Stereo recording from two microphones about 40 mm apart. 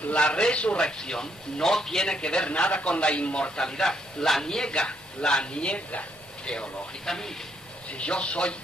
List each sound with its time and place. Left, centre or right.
0.1 s a man's voice: left
3.5 s a man's voice: centre
7.1 s a man's voice: centre
8.0 s a man's voice: left